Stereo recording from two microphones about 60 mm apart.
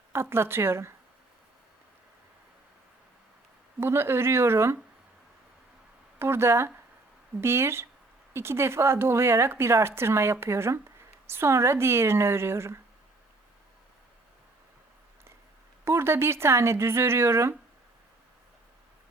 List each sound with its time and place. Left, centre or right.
0.1 s a woman's voice: right
3.8 s a woman's voice: right
6.1 s a woman's voice: right
15.8 s a woman's voice: right